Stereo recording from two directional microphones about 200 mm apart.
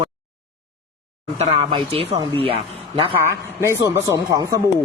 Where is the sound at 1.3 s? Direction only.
30° right (ahead or behind).